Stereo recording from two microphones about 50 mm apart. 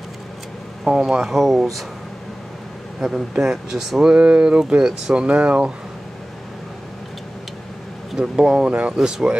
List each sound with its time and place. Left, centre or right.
0.8 s speech: centre
3.0 s speech: centre; by 5.7 s right
8.2 s speech: centre